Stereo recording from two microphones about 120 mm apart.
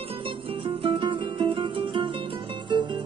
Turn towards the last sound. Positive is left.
turn(degrees=-40)  # may be behind; listen again after turning